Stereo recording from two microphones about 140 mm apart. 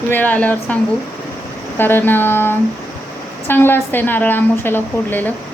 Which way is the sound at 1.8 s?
15° left (ahead or behind).